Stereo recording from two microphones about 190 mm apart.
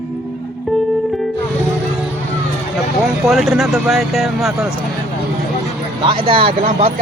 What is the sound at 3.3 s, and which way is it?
Speech, centre (ahead or behind).